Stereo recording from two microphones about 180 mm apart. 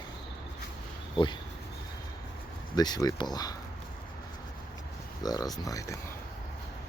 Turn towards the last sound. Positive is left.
turn(degrees=15)  # may be behind; listen again after turning